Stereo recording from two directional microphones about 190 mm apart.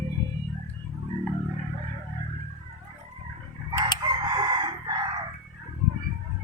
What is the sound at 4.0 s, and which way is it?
Crowing, 20° right (ahead or behind).